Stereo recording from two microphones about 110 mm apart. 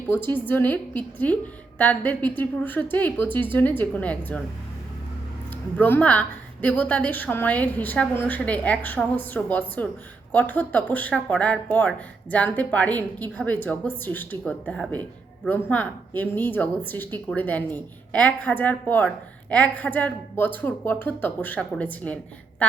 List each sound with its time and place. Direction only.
0.1 s speech: 20° left (ahead or behind)
5.7 s speech: 15° left (ahead or behind)